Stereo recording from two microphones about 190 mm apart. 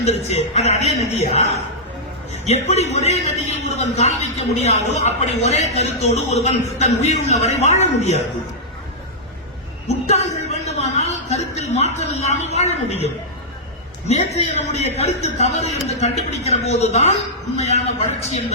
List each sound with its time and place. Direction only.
0.0 s a man's voice: 35° left (ahead or behind)
10.1 s a sound: 35° left (ahead or behind)
11.5 s a man's voice: 35° left (ahead or behind)
14.1 s a man's voice: 35° left (ahead or behind)